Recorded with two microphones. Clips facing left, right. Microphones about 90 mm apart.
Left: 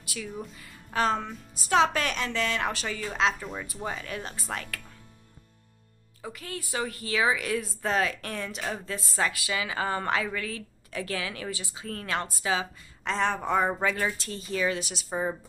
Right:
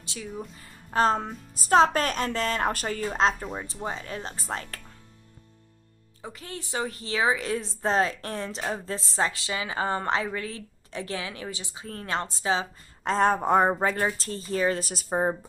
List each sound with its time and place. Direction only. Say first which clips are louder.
0.0 s a sound: left 1 dB; 25° right (ahead or behind)
0.3 s speech: right 1 dB; centre (ahead or behind)
0.6 s a woman's voice: right 4 dB; 35° right (ahead or behind)
3.5 s a woman's voice: right 1 dB; 25° right (ahead or behind)
6.2 s a woman's voice: left 1 dB; 25° right (ahead or behind)
13.0 s a woman's voice: right 5 dB; 40° right (ahead or behind)